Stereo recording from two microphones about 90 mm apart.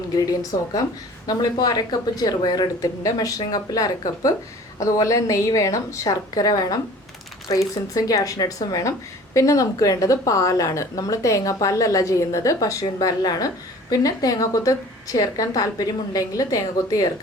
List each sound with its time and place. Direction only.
1.3 s speech: 45° left (ahead or behind)